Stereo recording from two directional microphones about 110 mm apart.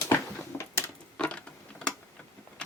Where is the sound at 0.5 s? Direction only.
15° left (ahead or behind).